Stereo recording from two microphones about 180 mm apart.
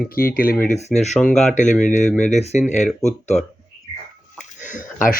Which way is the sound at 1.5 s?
45° left (ahead or behind).